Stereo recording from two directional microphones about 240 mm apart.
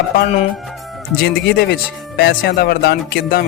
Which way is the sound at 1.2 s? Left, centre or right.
Left.